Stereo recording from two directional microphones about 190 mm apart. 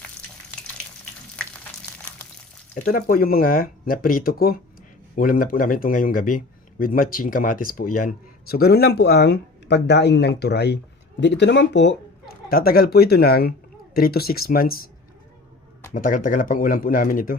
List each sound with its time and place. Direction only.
1.4 s frying: 5° left (ahead or behind)
2.7 s a man's voice: 50° left (ahead or behind); by 11.9 s 65° left (ahead or behind)
12.5 s a man's voice: 50° left (ahead or behind)
15.9 s a man's voice: 45° left (ahead or behind)